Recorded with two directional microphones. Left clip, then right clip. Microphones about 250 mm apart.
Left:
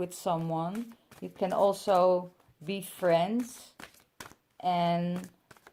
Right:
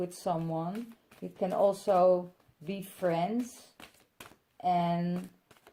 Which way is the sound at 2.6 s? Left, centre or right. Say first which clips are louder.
Left 2 dB; left.